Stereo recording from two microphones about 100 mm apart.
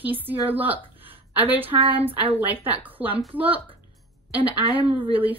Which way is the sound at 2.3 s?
20° right (ahead or behind).